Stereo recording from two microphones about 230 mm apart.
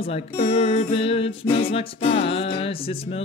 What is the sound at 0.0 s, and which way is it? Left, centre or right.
Music, left.